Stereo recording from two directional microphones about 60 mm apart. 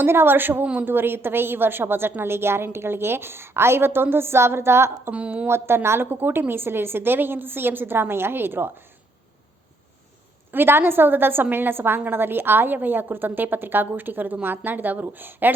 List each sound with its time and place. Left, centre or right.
0.0 s a woman's voice: right
0.6 s speech: right
0.9 s a woman's voice: right
5.1 s speech: right
5.5 s a woman's voice: right
10.5 s a woman's voice: right